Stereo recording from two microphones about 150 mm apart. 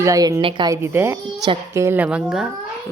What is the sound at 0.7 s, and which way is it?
A woman's voice, 15° right (ahead or behind).